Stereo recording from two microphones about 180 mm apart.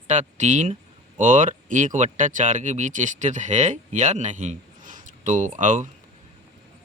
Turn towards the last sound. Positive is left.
turn(degrees=-45)  # may be behind; listen again after turning